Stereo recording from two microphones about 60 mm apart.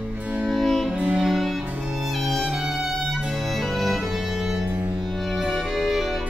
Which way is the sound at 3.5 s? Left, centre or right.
Centre.